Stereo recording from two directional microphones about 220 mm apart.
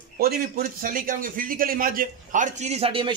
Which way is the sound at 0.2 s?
40° right (ahead or behind).